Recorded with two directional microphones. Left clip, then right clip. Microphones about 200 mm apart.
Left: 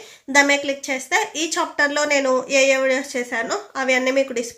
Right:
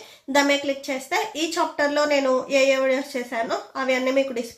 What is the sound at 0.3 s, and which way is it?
A woman's voice, 20° left (ahead or behind).